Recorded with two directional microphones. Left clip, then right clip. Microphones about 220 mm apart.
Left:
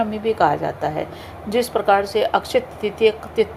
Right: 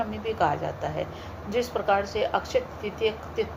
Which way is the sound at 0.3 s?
45° left (ahead or behind).